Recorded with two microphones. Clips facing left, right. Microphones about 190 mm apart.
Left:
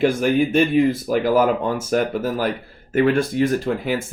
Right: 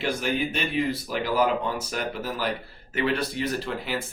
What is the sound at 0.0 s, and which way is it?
Speech, 50° left (ahead or behind).